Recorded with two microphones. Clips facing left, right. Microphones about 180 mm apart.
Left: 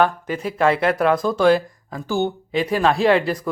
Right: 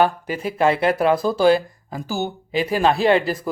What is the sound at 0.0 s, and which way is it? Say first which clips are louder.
Speech: even; 5° right (ahead or behind).